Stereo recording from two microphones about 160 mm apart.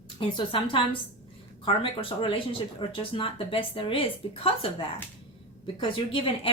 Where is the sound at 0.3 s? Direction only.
35° left (ahead or behind).